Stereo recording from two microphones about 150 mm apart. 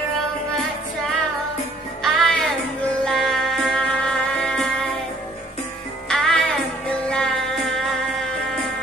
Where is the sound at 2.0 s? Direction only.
Centre (ahead or behind).